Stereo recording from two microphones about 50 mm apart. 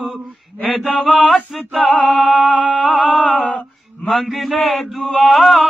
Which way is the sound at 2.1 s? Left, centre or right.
Left.